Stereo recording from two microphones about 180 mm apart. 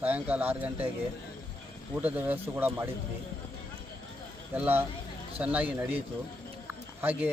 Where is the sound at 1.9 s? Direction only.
10° right (ahead or behind).